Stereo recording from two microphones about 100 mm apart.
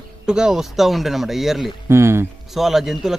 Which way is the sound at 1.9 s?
25° right (ahead or behind).